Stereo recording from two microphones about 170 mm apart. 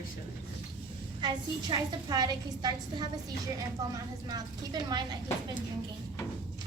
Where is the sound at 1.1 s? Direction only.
25° right (ahead or behind).